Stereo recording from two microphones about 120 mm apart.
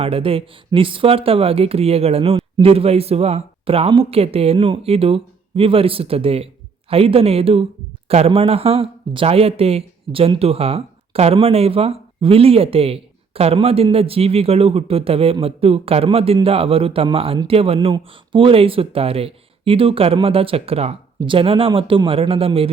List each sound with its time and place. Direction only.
0.0 s speech: 50° right (ahead or behind)